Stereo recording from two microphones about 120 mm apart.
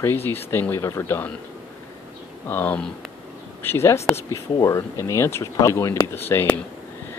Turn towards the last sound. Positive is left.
turn(degrees=20)  # may be behind; listen again after turning